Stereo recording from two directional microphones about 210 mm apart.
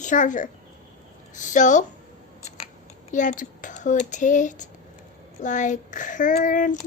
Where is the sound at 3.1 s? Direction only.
35° left (ahead or behind).